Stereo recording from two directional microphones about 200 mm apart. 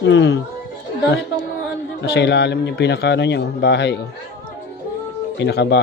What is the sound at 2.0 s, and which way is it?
A man's voice, 60° left (ahead or behind).